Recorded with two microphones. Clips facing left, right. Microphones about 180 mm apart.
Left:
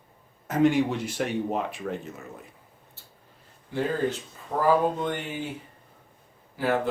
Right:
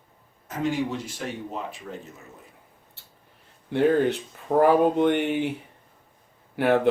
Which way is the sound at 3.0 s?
65° right (ahead or behind).